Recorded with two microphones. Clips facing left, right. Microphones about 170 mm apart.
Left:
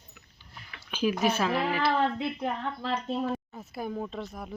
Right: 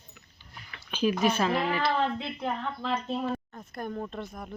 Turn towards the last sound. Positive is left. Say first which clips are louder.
# left 1 dB
turn(degrees=0)  # may be behind; listen again after turning